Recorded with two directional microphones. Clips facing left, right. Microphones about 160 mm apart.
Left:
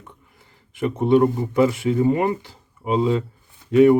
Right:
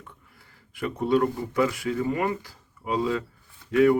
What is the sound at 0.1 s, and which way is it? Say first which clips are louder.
Speech: left 3 dB; 20° left (ahead or behind).